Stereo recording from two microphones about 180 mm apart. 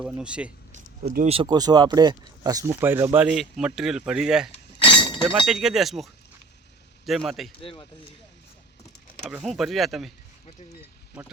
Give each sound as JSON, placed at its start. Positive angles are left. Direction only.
{"t": 0.2, "sound": "speech", "side_deg": -5}
{"t": 1.2, "sound": "speech", "side_deg": -30}
{"t": 4.8, "sound": "breaking", "side_deg": 25}
{"t": 5.5, "sound": "speech", "side_deg": 0}
{"t": 7.6, "sound": "speech", "side_deg": 30}
{"t": 9.4, "sound": "speech", "side_deg": 0}